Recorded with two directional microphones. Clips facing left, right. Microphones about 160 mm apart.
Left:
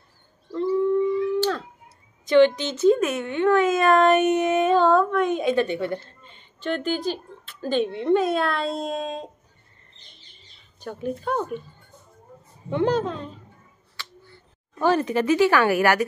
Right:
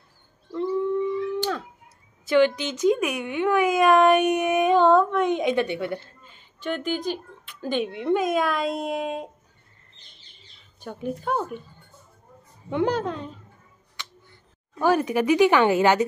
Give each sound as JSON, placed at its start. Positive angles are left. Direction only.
{"t": 0.6, "sound": "howl", "side_deg": -15}
{"t": 2.2, "sound": "speech", "side_deg": -10}
{"t": 10.8, "sound": "speech", "side_deg": -15}
{"t": 12.6, "sound": "speech", "side_deg": -10}
{"t": 13.9, "sound": "a sound", "side_deg": -20}